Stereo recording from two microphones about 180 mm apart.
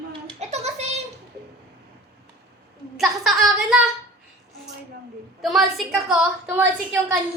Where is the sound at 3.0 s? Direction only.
Centre (ahead or behind).